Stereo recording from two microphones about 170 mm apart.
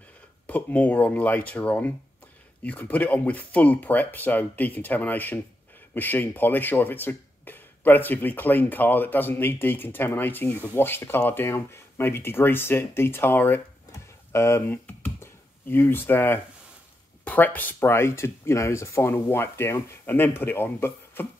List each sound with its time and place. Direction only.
0.5 s speech: 10° left (ahead or behind)